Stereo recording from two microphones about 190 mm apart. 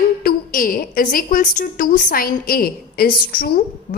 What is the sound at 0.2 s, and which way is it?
A woman's voice, 50° left (ahead or behind).